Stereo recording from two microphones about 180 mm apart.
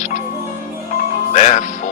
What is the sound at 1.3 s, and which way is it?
Speech, 45° left (ahead or behind).